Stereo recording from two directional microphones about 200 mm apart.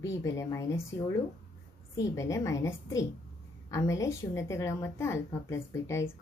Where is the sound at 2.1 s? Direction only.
15° left (ahead or behind).